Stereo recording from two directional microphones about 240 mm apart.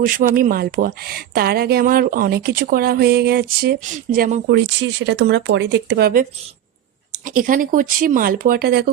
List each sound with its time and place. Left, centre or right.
0.0 s speech: right